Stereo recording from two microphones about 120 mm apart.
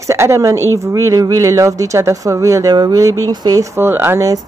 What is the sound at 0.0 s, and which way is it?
Speech, 25° right (ahead or behind).